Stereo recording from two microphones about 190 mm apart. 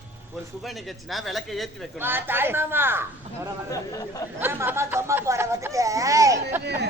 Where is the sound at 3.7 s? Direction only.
20° left (ahead or behind).